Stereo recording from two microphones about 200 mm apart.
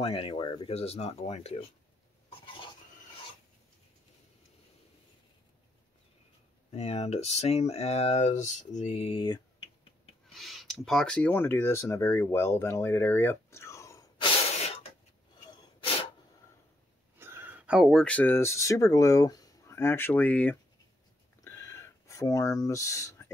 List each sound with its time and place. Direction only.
0.0 s speech: 25° left (ahead or behind)
6.7 s speech: 30° left (ahead or behind)
10.2 s speech: centre (ahead or behind)
17.2 s speech: 10° right (ahead or behind); by 20.5 s 10° left (ahead or behind)
21.5 s a sound: 15° left (ahead or behind)